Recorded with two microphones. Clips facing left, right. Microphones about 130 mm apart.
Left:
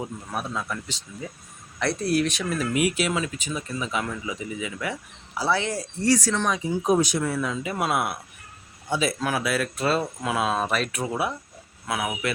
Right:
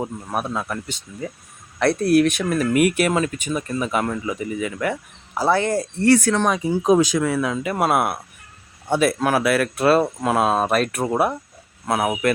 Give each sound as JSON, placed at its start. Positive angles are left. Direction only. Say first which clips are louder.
{"t": 0.0, "sound": "speech", "louder": "right 5 dB", "side_deg": -50}